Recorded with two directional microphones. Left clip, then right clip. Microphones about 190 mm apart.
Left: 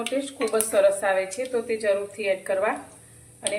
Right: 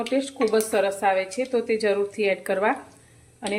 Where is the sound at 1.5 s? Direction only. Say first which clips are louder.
Right 1 dB; 60° right (ahead or behind).